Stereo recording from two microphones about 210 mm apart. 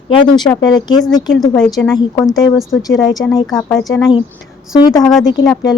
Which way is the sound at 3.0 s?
15° left (ahead or behind).